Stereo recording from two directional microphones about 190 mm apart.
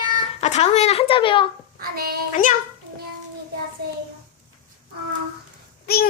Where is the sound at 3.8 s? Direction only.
55° right (ahead or behind).